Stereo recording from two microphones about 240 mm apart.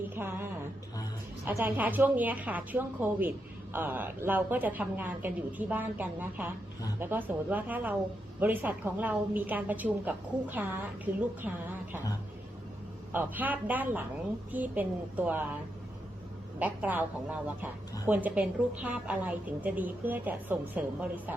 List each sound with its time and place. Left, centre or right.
0.2 s a woman's voice: centre
1.5 s a woman's voice: centre
13.1 s a woman's voice: centre
16.6 s a woman's voice: centre